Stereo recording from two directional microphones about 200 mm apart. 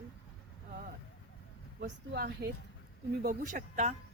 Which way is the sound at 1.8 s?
50° right (ahead or behind).